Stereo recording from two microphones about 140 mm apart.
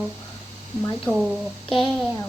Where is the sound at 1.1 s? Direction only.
10° left (ahead or behind).